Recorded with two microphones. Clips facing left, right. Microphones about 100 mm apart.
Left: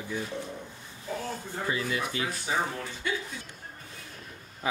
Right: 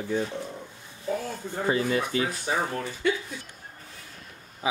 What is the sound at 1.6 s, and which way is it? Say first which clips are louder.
Speech: right 6 dB; 35° right (ahead or behind).